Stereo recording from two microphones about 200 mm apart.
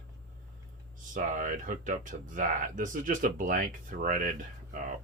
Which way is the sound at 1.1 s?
40° right (ahead or behind).